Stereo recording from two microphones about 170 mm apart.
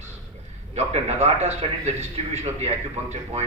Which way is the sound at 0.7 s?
40° right (ahead or behind).